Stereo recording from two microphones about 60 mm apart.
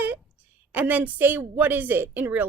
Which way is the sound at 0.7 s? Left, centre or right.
Right.